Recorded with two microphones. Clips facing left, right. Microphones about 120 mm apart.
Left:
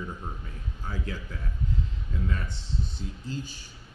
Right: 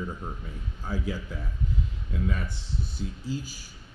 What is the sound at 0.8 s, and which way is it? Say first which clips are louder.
Speech: right 4 dB; 10° right (ahead or behind).